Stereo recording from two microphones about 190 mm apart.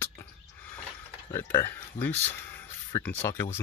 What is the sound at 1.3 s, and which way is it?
Speech, 15° left (ahead or behind).